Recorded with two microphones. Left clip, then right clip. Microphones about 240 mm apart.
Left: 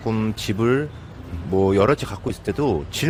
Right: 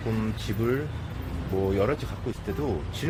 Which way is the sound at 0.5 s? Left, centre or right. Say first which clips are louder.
Left 8 dB; left.